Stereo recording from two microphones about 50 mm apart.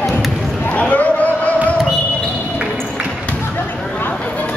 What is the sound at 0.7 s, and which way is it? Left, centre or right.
Basketball bounce, left.